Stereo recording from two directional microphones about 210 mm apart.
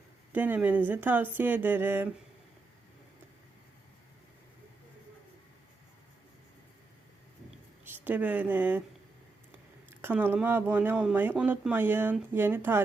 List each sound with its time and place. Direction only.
0.3 s speech: 10° right (ahead or behind)
7.9 s speech: 10° right (ahead or behind)
9.9 s speech: 10° right (ahead or behind)